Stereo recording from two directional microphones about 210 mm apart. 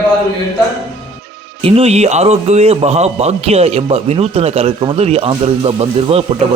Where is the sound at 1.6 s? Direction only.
30° right (ahead or behind).